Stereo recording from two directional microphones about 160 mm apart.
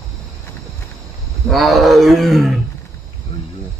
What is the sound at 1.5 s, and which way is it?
Wild animals, centre (ahead or behind).